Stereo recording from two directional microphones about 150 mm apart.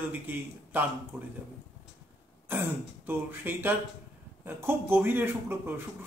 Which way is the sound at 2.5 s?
15° right (ahead or behind).